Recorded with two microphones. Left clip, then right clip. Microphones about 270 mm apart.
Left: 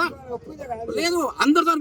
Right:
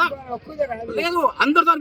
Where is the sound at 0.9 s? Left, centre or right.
Centre.